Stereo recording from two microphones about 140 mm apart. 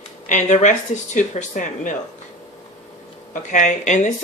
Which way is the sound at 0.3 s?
60° left (ahead or behind).